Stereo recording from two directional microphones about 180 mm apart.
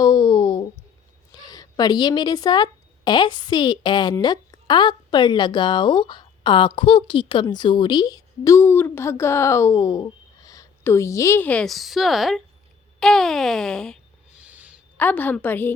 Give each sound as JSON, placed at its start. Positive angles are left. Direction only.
{"t": 0.0, "sound": "a sound", "side_deg": 20}
{"t": 1.3, "sound": "a woman's voice", "side_deg": 20}
{"t": 14.3, "sound": "owl", "side_deg": -10}
{"t": 14.9, "sound": "a woman's voice", "side_deg": 10}